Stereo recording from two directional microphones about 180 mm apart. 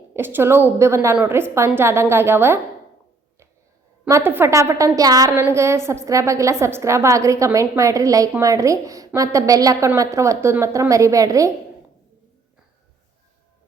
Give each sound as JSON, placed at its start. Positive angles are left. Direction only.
{"t": 0.1, "sound": "a woman's voice", "side_deg": -10}
{"t": 4.1, "sound": "a woman's voice", "side_deg": -10}